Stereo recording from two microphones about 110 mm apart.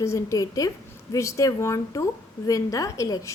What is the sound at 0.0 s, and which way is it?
A woman's voice, 25° left (ahead or behind).